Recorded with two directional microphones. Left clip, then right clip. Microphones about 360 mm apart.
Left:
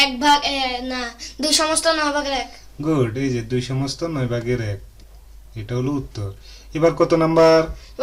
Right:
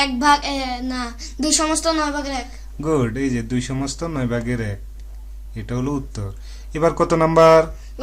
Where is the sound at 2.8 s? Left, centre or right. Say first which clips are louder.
Even; right.